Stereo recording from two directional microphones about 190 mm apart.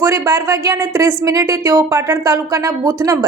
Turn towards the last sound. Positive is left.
turn(degrees=-15)  # may be behind; listen again after turning